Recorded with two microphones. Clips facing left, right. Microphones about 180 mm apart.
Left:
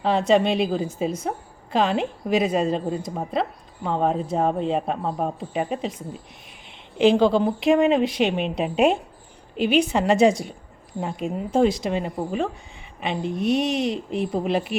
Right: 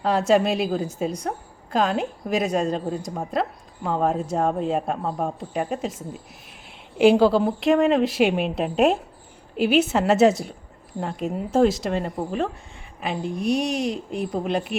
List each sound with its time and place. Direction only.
0.0 s a man's voice: centre (ahead or behind)
6.9 s a man's voice: 10° right (ahead or behind)